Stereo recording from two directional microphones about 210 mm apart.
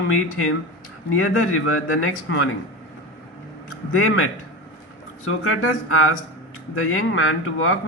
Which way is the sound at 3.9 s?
80° left.